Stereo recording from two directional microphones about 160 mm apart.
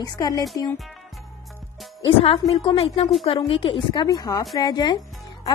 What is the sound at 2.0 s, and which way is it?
A woman's voice, 35° left (ahead or behind).